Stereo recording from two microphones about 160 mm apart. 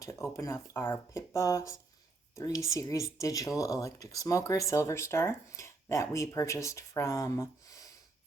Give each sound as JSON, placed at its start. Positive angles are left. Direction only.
{"t": 0.0, "sound": "speech", "side_deg": 20}